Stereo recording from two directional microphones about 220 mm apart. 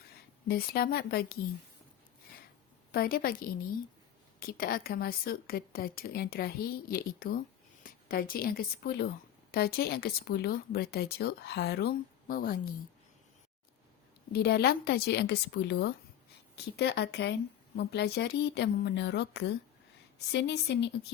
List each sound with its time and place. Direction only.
0.4 s a woman's voice: 45° left (ahead or behind)
2.9 s a woman's voice: 40° left (ahead or behind)
14.3 s a woman's voice: 45° left (ahead or behind)